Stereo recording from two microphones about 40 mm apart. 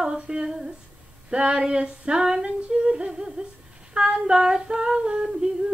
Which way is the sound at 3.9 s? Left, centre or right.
Right.